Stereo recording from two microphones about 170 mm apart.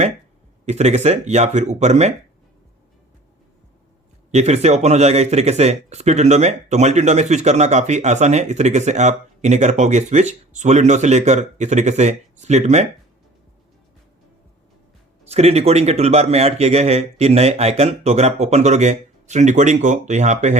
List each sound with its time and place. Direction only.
0.6 s speech: 40° right (ahead or behind)
4.3 s speech: 40° right (ahead or behind)
15.3 s speech: 40° right (ahead or behind)